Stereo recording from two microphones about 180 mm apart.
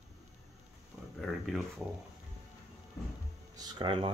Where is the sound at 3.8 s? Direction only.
30° right (ahead or behind).